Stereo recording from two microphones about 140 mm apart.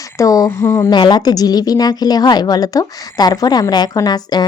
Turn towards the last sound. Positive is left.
turn(degrees=30)  # may be behind; listen again after turning